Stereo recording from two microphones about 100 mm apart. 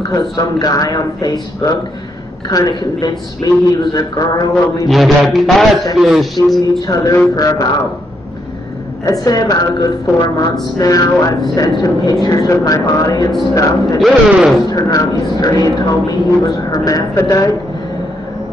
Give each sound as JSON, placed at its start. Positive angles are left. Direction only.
{"t": 0.1, "sound": "speech", "side_deg": 40}
{"t": 2.5, "sound": "speech", "side_deg": 40}
{"t": 4.8, "sound": "a man's voice", "side_deg": 0}
{"t": 6.8, "sound": "speech", "side_deg": 40}
{"t": 9.0, "sound": "speech", "side_deg": 35}
{"t": 13.9, "sound": "a man's voice", "side_deg": 0}
{"t": 14.7, "sound": "speech", "side_deg": 40}